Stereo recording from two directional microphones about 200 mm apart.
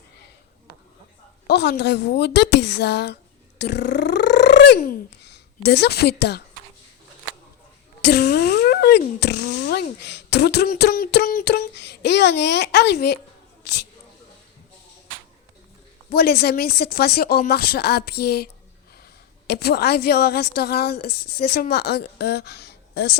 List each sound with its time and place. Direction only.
1.5 s speech: 55° left (ahead or behind)
8.0 s speech: 55° left (ahead or behind)
16.1 s a woman's voice: 55° left (ahead or behind)
19.5 s a woman's voice: 50° left (ahead or behind)